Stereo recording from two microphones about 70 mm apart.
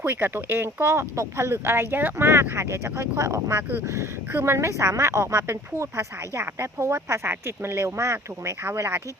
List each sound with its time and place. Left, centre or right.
0.0 s speech: right
4.3 s speech: right